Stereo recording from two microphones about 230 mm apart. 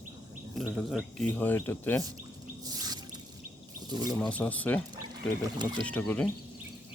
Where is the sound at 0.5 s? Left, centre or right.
Centre.